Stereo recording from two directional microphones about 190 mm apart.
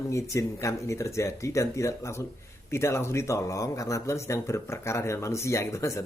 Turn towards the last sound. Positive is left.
turn(degrees=15)  # may be behind; listen again after turning